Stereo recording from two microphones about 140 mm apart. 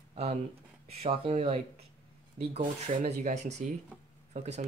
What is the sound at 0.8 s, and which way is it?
Speech, 45° right (ahead or behind).